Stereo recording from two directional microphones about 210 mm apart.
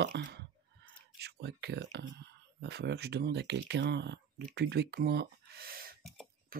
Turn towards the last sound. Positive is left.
turn(degrees=-45)  # may be behind; listen again after turning